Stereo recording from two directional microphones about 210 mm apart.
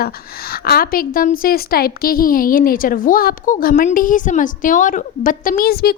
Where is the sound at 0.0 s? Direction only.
45° left (ahead or behind).